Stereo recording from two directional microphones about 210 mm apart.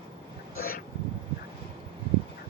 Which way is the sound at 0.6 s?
45° left (ahead or behind).